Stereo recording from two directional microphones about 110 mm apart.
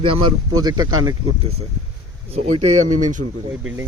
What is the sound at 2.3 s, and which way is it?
Speech, 80° right.